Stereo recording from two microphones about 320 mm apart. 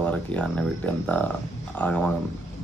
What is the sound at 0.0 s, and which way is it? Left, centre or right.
Speech, centre.